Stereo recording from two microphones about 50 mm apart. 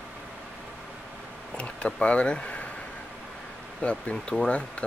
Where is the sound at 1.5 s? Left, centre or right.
Left.